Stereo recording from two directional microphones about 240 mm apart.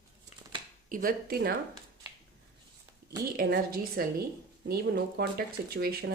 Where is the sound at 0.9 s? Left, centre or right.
Right.